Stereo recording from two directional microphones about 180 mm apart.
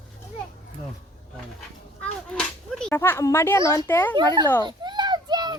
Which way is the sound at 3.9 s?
15° left (ahead or behind).